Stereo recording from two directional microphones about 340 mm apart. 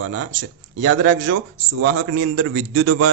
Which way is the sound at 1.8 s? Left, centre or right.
Right.